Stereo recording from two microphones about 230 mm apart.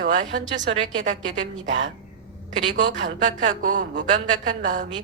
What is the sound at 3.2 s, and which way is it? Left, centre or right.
A woman's voice, right.